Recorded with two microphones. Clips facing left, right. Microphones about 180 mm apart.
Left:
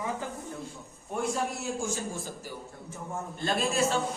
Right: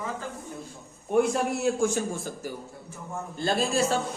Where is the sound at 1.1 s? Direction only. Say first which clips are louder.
Right 7 dB; 65° right (ahead or behind).